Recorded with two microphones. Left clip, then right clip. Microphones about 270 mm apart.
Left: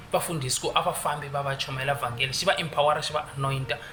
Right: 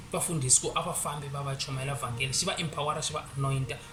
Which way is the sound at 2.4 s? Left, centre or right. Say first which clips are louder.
Left 12 dB; centre.